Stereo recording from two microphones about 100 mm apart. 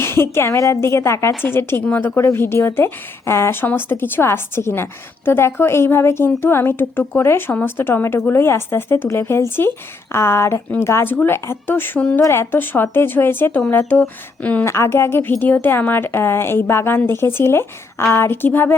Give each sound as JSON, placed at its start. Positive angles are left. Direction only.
{"t": 0.0, "sound": "a woman's voice", "side_deg": 25}
{"t": 12.2, "sound": "a woman's voice", "side_deg": 25}